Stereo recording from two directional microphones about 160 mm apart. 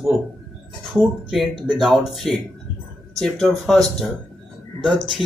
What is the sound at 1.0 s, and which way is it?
Speech, centre (ahead or behind).